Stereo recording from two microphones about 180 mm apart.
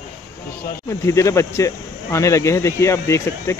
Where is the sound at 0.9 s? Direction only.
15° left (ahead or behind).